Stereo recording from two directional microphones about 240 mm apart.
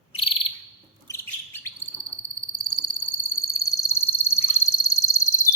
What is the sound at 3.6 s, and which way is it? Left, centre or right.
Frog, centre.